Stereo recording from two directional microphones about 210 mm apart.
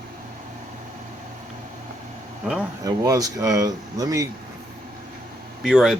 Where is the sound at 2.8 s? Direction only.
15° right (ahead or behind).